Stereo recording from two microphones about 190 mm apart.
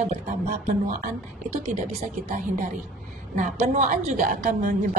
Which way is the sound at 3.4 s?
40° right (ahead or behind).